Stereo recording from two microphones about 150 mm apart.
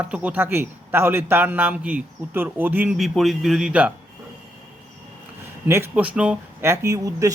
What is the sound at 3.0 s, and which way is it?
Speech, centre (ahead or behind).